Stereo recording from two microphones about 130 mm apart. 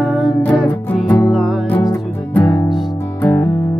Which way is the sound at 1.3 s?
Centre (ahead or behind).